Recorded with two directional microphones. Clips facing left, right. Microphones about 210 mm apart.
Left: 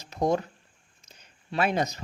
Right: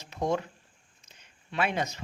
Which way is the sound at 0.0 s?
40° left (ahead or behind).